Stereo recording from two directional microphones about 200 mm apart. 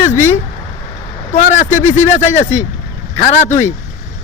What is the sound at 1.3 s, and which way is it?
Speech, 40° left (ahead or behind).